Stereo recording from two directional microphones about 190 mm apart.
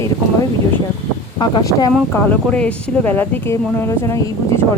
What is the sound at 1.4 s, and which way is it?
Speech, 20° left (ahead or behind).